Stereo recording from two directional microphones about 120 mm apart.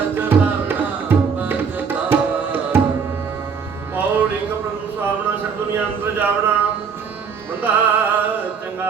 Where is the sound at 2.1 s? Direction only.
15° right (ahead or behind).